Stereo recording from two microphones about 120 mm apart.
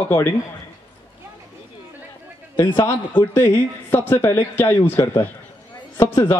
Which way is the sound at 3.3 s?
15° left (ahead or behind).